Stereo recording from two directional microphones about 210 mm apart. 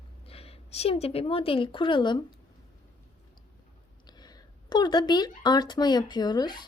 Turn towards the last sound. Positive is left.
turn(degrees=20)  # may be behind; listen again after turning